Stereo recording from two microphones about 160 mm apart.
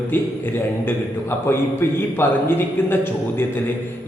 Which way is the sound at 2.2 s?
15° left (ahead or behind).